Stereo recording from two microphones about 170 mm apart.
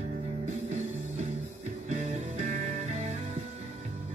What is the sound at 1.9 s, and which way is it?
Music, 45° right (ahead or behind).